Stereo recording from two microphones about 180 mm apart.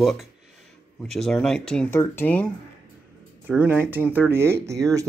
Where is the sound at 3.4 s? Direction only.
10° right (ahead or behind).